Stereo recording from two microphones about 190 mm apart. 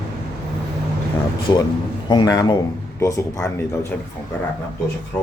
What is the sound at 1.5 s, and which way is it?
Speech, 15° left (ahead or behind).